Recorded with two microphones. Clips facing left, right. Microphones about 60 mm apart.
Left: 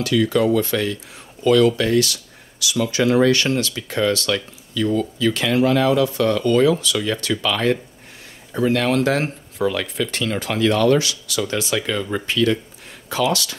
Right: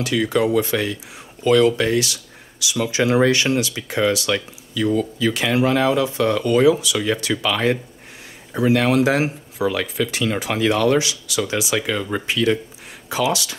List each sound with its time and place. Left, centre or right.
0.0 s speech: right